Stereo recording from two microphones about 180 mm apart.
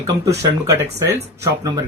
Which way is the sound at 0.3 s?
15° right (ahead or behind).